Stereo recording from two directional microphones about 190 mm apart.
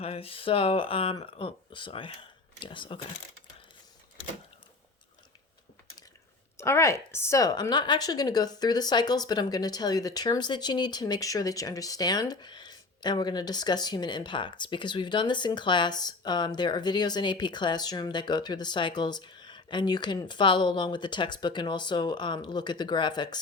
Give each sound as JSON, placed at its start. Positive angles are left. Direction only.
{"t": 0.0, "sound": "speech", "side_deg": 30}
{"t": 6.6, "sound": "speech", "side_deg": 15}